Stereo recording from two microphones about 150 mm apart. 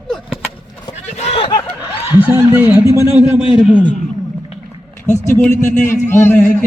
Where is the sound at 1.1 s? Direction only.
40° left (ahead or behind).